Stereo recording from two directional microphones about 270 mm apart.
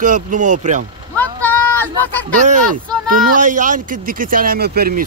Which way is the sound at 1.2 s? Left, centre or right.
Centre.